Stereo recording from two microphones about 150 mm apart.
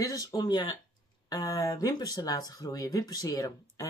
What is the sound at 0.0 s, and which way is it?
Speech, 25° left (ahead or behind).